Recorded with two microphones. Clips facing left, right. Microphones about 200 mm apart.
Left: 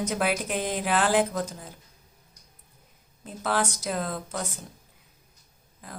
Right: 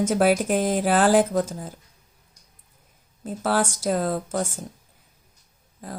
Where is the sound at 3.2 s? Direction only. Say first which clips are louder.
Right 4 dB; 45° right (ahead or behind).